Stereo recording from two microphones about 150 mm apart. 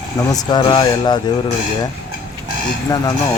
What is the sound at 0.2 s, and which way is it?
Speech, 25° left (ahead or behind).